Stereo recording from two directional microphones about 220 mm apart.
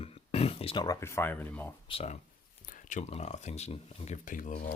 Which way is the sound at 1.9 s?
25° left (ahead or behind).